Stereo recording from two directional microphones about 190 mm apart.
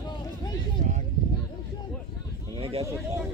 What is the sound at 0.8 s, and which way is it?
Speech, 40° right (ahead or behind).